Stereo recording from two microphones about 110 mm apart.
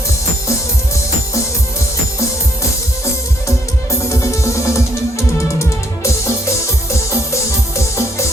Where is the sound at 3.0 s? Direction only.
30° left (ahead or behind).